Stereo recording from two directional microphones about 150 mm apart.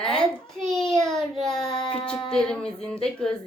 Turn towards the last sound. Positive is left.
turn(degrees=5)  # may be behind; listen again after turning